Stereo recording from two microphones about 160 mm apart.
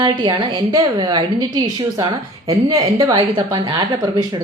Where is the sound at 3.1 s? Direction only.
30° right (ahead or behind).